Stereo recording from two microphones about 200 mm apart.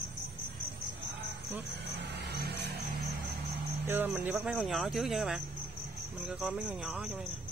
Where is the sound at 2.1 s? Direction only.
55° right (ahead or behind).